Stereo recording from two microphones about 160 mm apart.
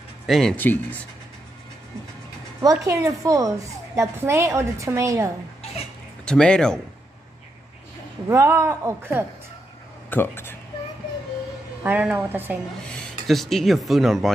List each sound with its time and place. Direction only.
0.3 s speech: centre (ahead or behind)
2.6 s a woman's voice: 20° right (ahead or behind)
6.2 s speech: 5° left (ahead or behind)
8.3 s a man's voice: 15° right (ahead or behind)
10.0 s speech: 10° left (ahead or behind)
11.8 s a man's voice: 10° right (ahead or behind)
12.8 s speech: centre (ahead or behind)